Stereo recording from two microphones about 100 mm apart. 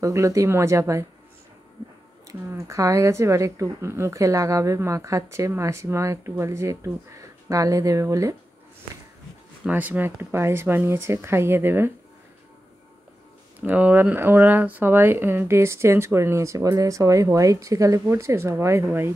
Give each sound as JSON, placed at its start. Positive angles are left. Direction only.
{"t": 0.0, "sound": "speech", "side_deg": -30}
{"t": 2.2, "sound": "speech", "side_deg": -30}
{"t": 9.7, "sound": "speech", "side_deg": -15}
{"t": 13.6, "sound": "speech", "side_deg": -15}